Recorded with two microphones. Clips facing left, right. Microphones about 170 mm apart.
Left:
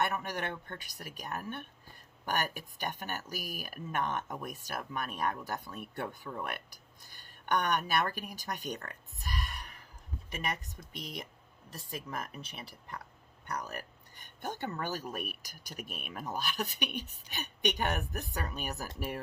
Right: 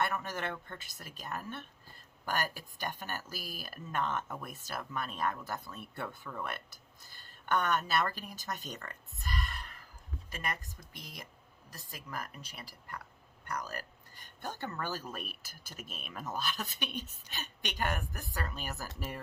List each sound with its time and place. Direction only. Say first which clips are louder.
0.0 s speech: left 1 dB; 15° left (ahead or behind)
10.2 s speech: left 2 dB; 20° left (ahead or behind)